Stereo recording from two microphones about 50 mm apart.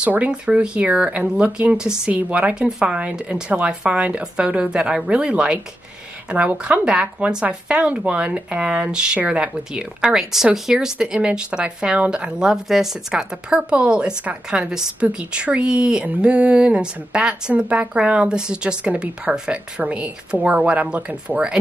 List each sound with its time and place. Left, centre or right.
0.3 s speech: right
1.8 s speech: centre
2.1 s speech: right; by 12.9 s centre
13.1 s speech: centre